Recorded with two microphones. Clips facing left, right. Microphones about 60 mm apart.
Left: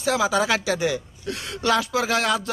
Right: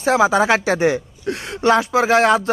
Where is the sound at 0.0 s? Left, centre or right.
Right.